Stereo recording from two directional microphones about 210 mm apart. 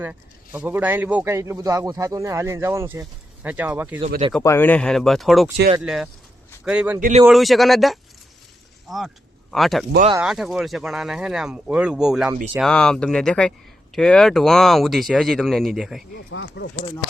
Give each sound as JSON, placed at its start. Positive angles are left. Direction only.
{"t": 0.0, "sound": "a man's voice", "side_deg": -5}
{"t": 4.4, "sound": "a man's voice", "side_deg": 10}
{"t": 16.3, "sound": "speech", "side_deg": 60}